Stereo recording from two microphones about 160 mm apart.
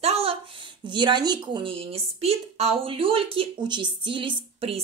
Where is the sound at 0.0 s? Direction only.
40° right (ahead or behind).